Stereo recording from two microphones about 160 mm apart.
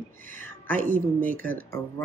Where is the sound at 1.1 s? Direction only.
10° left (ahead or behind).